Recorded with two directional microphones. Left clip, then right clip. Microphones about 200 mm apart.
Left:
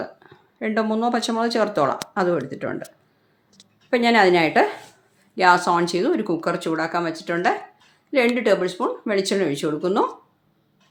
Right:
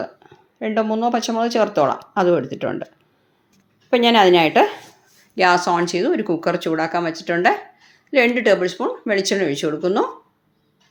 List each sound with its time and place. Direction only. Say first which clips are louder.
0.0 s speech: right 3 dB; 5° left (ahead or behind)
2.1 s speech: right 5 dB; 15° right (ahead or behind)
3.8 s speech: right 3 dB; 10° right (ahead or behind)